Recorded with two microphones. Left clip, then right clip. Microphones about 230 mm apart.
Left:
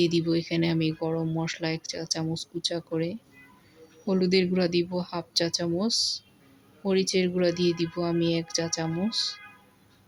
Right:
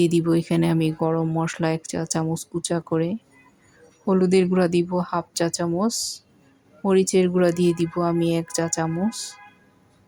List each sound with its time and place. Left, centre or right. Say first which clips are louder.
0.0 s speech: right 5 dB; centre